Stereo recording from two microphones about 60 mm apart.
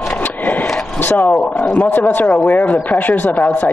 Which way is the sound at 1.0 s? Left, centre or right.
Left.